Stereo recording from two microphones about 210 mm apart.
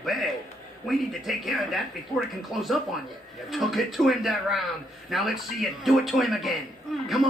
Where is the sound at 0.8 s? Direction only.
Centre (ahead or behind).